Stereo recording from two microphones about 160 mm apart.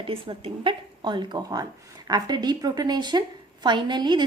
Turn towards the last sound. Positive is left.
turn(degrees=-25)  # may be behind; listen again after turning